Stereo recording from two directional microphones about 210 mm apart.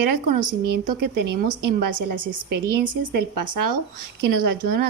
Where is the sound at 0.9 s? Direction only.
50° right (ahead or behind).